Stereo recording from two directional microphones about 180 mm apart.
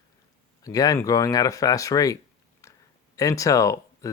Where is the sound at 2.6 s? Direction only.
15° left (ahead or behind).